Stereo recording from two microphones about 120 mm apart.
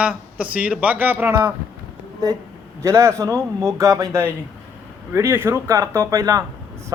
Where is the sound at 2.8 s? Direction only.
25° right (ahead or behind).